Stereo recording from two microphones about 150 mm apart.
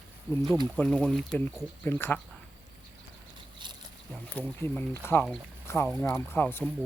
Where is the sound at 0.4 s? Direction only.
30° right (ahead or behind).